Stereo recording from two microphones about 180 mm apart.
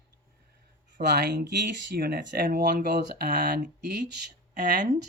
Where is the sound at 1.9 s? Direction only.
55° right (ahead or behind).